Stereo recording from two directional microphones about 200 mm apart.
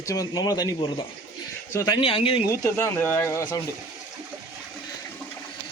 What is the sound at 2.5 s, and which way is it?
A man's voice, 15° left (ahead or behind).